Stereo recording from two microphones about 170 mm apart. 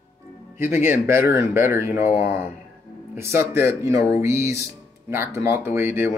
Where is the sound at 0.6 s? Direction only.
15° right (ahead or behind).